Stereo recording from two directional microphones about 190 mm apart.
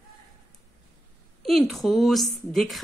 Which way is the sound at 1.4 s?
Centre (ahead or behind).